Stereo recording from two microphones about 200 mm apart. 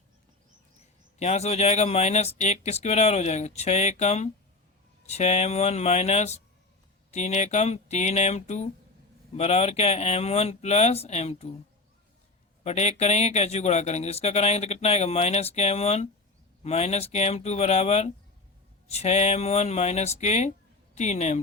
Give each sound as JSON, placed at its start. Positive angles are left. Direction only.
{"t": 1.2, "sound": "speech", "side_deg": 35}
{"t": 12.6, "sound": "speech", "side_deg": 30}